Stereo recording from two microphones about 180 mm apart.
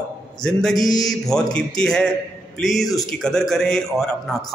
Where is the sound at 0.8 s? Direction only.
20° left (ahead or behind).